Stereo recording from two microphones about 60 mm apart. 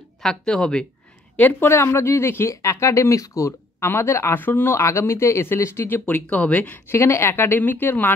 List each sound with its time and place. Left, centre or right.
0.2 s speech: centre
1.3 s speech: left
1.7 s speech: left
4.3 s a woman's voice: left
4.7 s speech: left
5.9 s a woman's voice: left
6.9 s a woman's voice: left